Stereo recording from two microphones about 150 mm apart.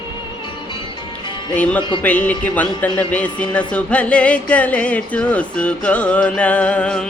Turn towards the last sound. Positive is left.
turn(degrees=5)  # may be behind; listen again after turning